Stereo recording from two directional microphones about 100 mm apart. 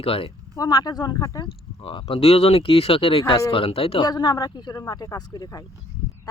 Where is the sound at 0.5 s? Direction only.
40° left (ahead or behind).